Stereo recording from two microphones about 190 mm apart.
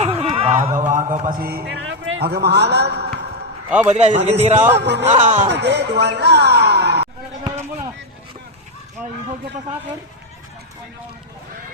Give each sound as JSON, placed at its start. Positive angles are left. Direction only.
{"t": 0.0, "sound": "a sound", "side_deg": -30}
{"t": 0.6, "sound": "a sound", "side_deg": -15}
{"t": 1.2, "sound": "a sound", "side_deg": -50}
{"t": 1.8, "sound": "a man's voice", "side_deg": -80}
{"t": 3.7, "sound": "a man's voice", "side_deg": -5}
{"t": 3.9, "sound": "a man's voice", "side_deg": -35}
{"t": 4.8, "sound": "music", "side_deg": -65}
{"t": 5.0, "sound": "a man's voice", "side_deg": -35}
{"t": 5.5, "sound": "speech", "side_deg": -65}